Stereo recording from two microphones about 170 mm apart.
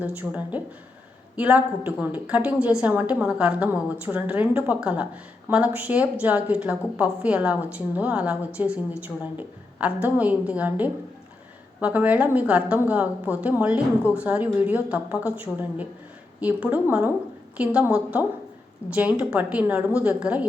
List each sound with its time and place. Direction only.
0.0 s a woman's voice: 10° right (ahead or behind)